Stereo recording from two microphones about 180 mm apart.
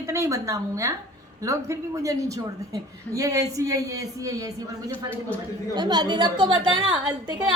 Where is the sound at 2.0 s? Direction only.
20° right (ahead or behind).